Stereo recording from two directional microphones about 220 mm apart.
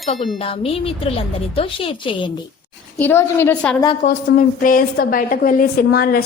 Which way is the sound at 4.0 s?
40° left (ahead or behind).